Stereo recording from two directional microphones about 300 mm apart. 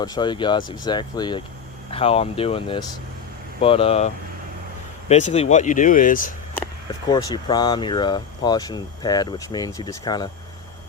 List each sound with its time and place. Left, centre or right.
0.0 s speech: centre
7.1 s speech: centre